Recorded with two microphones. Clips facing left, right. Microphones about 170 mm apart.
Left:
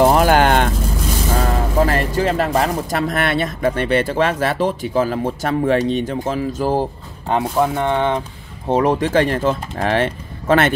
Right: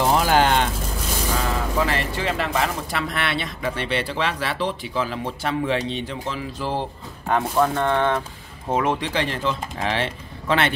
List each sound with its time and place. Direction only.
0.0 s a sound: 55° left (ahead or behind)
1.3 s speech: 45° left (ahead or behind)
7.2 s speech: 20° left (ahead or behind)
8.6 s speech: 35° left (ahead or behind)